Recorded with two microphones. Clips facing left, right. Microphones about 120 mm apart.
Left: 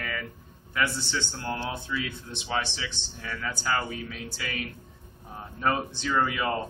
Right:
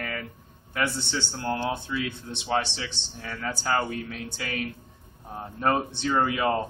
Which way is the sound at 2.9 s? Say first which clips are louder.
Even; 35° right (ahead or behind).